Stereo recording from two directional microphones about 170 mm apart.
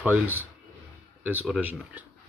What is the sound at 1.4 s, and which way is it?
Speech, 5° right (ahead or behind).